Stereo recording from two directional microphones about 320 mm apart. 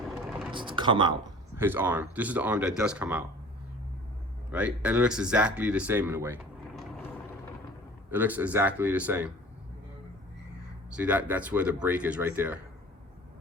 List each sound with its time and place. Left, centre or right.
0.5 s speech: centre
4.5 s speech: centre
8.1 s speech: centre
10.9 s speech: centre